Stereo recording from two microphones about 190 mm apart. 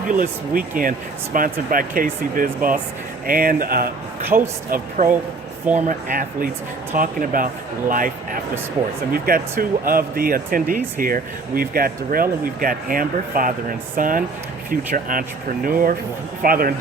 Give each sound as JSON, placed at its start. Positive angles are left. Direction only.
{"t": 0.1, "sound": "speech", "side_deg": -45}